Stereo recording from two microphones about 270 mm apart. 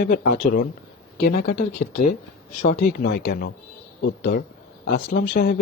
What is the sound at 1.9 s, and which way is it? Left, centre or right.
Speech, left.